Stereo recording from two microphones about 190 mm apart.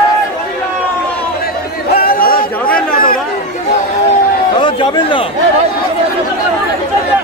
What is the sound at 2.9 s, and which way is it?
Chatter, 50° left (ahead or behind).